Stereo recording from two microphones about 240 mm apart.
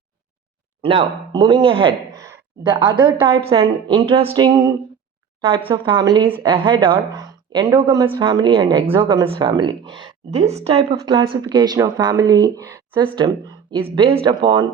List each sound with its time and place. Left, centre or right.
0.8 s speech: right